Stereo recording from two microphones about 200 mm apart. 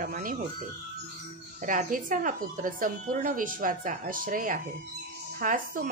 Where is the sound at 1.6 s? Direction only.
40° right (ahead or behind).